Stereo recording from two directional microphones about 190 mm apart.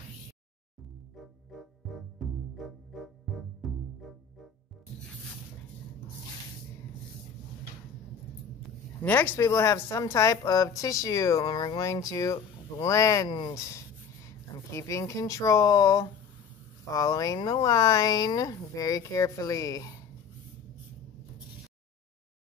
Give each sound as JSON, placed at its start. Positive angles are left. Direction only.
{"t": 1.1, "sound": "music", "side_deg": 0}
{"t": 9.0, "sound": "a woman's voice", "side_deg": 10}